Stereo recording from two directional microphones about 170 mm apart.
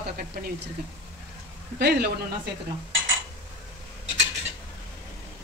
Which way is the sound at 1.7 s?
70° right (ahead or behind).